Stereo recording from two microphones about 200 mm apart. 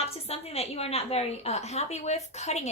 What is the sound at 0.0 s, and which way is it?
A woman's voice, 30° left (ahead or behind).